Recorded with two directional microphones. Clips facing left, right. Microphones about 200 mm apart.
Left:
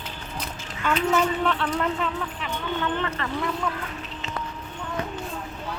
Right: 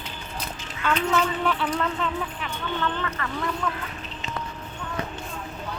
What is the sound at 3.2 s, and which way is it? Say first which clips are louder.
Speech: left 2 dB; 30° left (ahead or behind).